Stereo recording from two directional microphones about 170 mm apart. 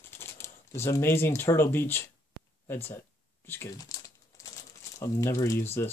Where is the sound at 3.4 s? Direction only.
15° left (ahead or behind).